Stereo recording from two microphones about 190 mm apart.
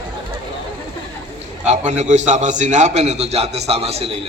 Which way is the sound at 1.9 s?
40° right (ahead or behind).